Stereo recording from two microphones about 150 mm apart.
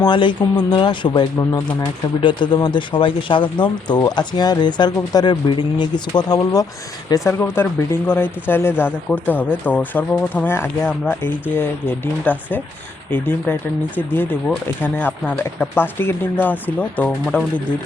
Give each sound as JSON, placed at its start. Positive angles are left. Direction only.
{"t": 0.0, "sound": "speech", "side_deg": 30}